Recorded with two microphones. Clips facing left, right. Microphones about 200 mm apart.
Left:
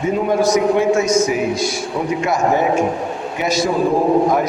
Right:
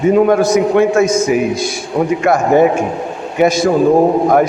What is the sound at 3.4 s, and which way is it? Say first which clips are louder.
Speech: right 7 dB; 50° right (ahead or behind).